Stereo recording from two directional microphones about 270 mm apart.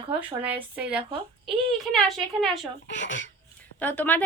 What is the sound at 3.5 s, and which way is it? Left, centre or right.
Speech, centre.